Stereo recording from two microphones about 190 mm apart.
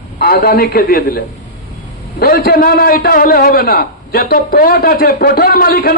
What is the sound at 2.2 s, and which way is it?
A man's voice, 55° left (ahead or behind).